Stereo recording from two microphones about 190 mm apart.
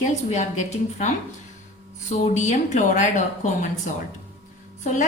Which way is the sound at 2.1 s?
40° left (ahead or behind).